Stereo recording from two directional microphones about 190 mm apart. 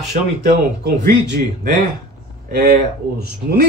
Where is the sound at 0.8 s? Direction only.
60° right (ahead or behind).